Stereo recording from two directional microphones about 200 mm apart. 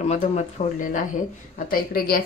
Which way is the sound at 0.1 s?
35° left (ahead or behind).